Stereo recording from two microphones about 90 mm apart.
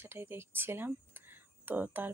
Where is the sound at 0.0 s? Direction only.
25° right (ahead or behind).